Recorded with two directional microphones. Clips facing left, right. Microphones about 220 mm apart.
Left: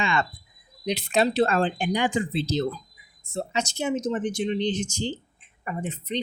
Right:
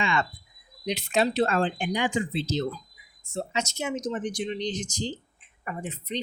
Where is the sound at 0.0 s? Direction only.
35° left (ahead or behind).